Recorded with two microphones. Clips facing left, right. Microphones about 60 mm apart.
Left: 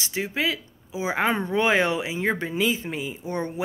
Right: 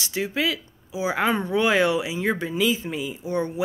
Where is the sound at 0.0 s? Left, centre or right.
Left.